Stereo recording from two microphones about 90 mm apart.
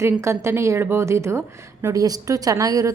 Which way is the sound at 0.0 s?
30° right (ahead or behind).